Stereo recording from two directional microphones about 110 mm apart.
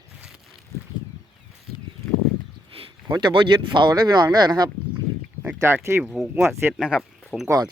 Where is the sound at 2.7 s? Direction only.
60° right (ahead or behind).